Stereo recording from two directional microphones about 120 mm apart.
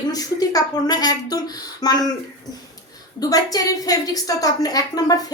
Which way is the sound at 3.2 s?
30° left (ahead or behind).